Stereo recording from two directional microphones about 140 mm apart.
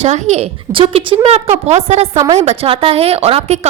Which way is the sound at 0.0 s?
50° right (ahead or behind).